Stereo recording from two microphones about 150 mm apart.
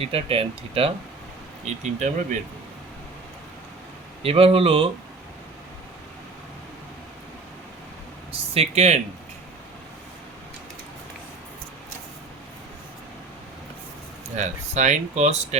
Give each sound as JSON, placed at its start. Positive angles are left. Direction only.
{"t": 0.0, "sound": "speech", "side_deg": -40}
{"t": 1.6, "sound": "speech", "side_deg": -50}
{"t": 4.2, "sound": "speech", "side_deg": -40}
{"t": 8.5, "sound": "speech", "side_deg": -45}
{"t": 14.3, "sound": "speech", "side_deg": -50}